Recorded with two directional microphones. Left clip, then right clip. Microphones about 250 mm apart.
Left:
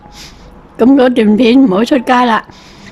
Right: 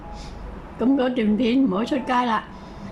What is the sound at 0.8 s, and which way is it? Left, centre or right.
Speech, left.